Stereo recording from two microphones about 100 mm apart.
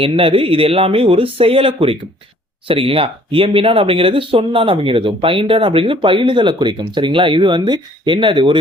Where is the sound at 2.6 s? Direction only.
60° right (ahead or behind).